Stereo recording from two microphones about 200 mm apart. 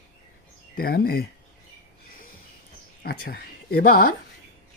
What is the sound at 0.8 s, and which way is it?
Speech, 50° left (ahead or behind).